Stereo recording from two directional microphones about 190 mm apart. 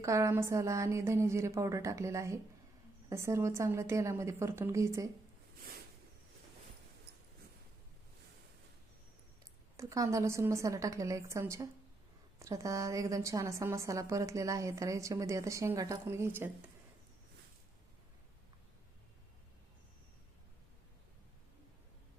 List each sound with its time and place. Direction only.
0.0 s a woman's voice: 15° right (ahead or behind)
9.7 s a woman's voice: 15° right (ahead or behind)